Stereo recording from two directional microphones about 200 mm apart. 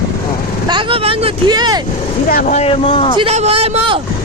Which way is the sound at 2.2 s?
40° left (ahead or behind).